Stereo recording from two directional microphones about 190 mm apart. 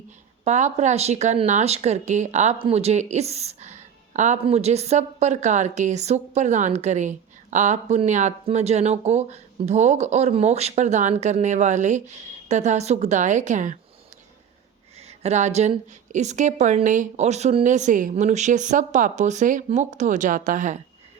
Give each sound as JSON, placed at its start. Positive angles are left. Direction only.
{"t": 0.4, "sound": "speech", "side_deg": -40}
{"t": 14.9, "sound": "speech", "side_deg": -35}